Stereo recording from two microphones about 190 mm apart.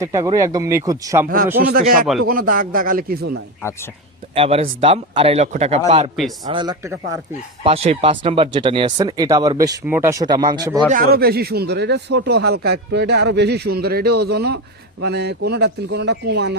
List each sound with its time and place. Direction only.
0.0 s speech: 15° right (ahead or behind)
1.6 s speech: 50° right (ahead or behind)
4.4 s speech: 30° right (ahead or behind)
6.8 s speech: 15° right (ahead or behind)
7.6 s speech: 30° right (ahead or behind)
10.8 s speech: 45° right (ahead or behind)